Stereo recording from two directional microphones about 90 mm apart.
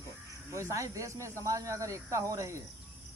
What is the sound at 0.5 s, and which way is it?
Speech, 35° right (ahead or behind).